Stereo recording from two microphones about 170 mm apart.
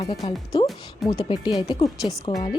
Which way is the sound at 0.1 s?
25° left (ahead or behind).